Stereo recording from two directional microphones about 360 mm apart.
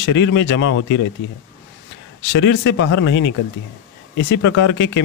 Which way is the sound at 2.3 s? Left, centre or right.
Left.